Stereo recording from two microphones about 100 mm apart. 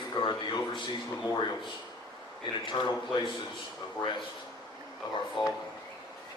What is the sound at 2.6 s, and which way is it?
Speech, 50° left (ahead or behind).